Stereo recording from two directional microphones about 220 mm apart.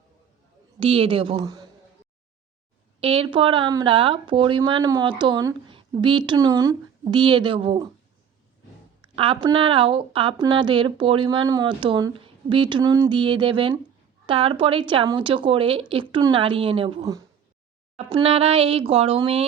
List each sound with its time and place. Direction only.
0.8 s speech: 25° right (ahead or behind)
3.0 s speech: 25° right (ahead or behind)
9.1 s speech: 25° right (ahead or behind)